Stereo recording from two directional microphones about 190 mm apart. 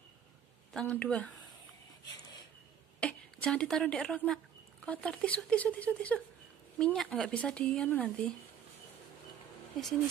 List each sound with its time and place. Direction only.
0.7 s speech: 5° left (ahead or behind)
2.0 s a sound: 20° left (ahead or behind)
3.0 s speech: 5° left (ahead or behind)